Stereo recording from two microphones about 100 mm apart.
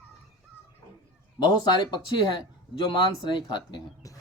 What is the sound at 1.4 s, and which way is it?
A man's voice, 45° left (ahead or behind).